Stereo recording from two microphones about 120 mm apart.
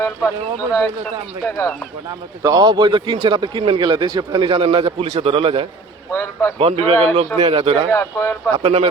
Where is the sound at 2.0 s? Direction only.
35° right (ahead or behind).